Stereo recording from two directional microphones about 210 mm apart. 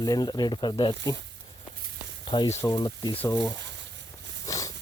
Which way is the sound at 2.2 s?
20° left (ahead or behind).